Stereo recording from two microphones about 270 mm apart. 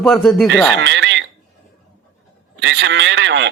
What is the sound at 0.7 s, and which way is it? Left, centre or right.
Speech, right.